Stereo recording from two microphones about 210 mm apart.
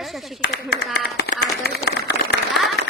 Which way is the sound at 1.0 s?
50° left (ahead or behind).